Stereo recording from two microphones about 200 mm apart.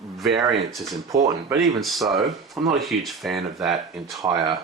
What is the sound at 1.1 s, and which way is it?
Speech, 15° right (ahead or behind).